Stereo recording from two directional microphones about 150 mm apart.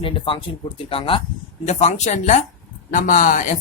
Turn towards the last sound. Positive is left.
turn(degrees=60)  # may be behind; listen again after turning